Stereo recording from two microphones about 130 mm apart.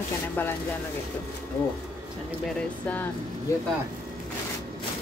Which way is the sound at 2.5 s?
10° left (ahead or behind).